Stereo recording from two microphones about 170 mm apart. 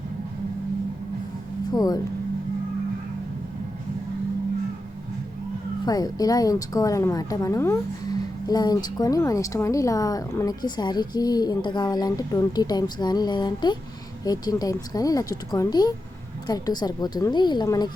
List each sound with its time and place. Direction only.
1.7 s a woman's voice: 25° left (ahead or behind)
5.8 s a woman's voice: 25° left (ahead or behind)